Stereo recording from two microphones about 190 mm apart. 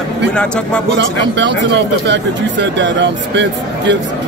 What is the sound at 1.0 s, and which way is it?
Speech, 70° right (ahead or behind).